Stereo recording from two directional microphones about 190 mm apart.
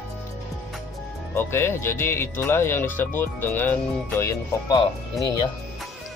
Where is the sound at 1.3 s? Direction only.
15° left (ahead or behind).